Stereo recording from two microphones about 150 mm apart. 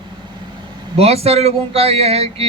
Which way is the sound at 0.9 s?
40° right (ahead or behind).